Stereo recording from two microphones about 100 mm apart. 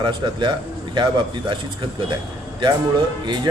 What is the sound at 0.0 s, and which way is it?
Speech, 50° right (ahead or behind).